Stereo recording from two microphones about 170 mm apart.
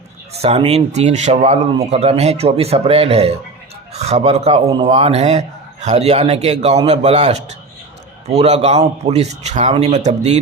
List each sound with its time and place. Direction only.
0.3 s speech: 35° right (ahead or behind)